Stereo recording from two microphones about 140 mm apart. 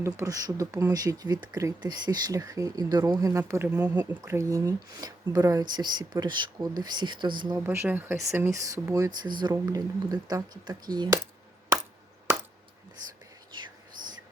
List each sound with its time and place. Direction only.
0.0 s speech: 25° right (ahead or behind)
7.5 s speech: 20° right (ahead or behind)
13.5 s whispering: 35° right (ahead or behind)